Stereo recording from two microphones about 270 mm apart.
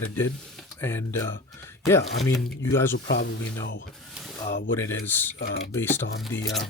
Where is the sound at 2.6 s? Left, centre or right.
Centre.